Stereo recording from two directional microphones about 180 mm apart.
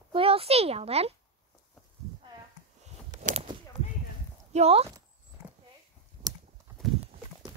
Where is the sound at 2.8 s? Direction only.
40° right (ahead or behind).